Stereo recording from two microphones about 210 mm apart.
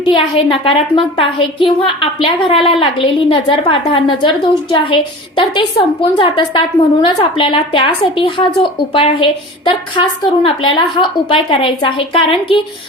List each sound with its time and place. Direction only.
0.0 s a woman's voice: 25° left (ahead or behind)